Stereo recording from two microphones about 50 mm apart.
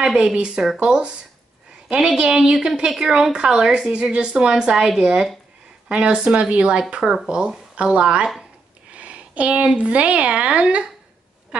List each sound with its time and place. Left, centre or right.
0.0 s a woman's voice: centre
2.1 s a woman's voice: centre
8.9 s a sound: right
9.8 s a woman's voice: right